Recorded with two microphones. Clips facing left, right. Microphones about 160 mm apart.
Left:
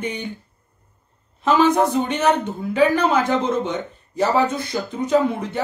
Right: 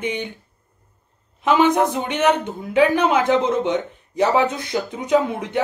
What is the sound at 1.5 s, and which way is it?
Speech, 10° right (ahead or behind).